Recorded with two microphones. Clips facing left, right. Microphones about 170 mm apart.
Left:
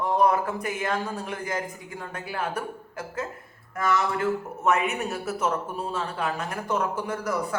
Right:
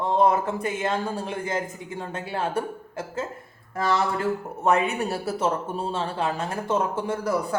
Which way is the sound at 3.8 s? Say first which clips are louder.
Right 1 dB; 30° right (ahead or behind).